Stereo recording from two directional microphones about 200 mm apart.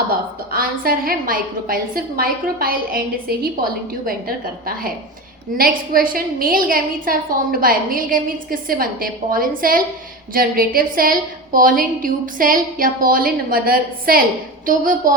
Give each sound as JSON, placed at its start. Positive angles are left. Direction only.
{"t": 0.5, "sound": "a woman's voice", "side_deg": -45}